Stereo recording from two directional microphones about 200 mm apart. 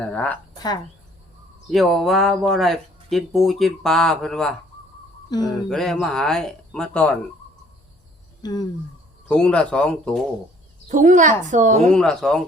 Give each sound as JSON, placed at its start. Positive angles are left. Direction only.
{"t": 0.0, "sound": "speech", "side_deg": 5}
{"t": 1.7, "sound": "speech", "side_deg": 0}
{"t": 5.3, "sound": "speech", "side_deg": 20}
{"t": 5.6, "sound": "speech", "side_deg": 0}
{"t": 8.4, "sound": "speech", "side_deg": 20}
{"t": 9.3, "sound": "speech", "side_deg": 5}
{"t": 10.8, "sound": "a woman's voice", "side_deg": -40}
{"t": 11.9, "sound": "speech", "side_deg": 5}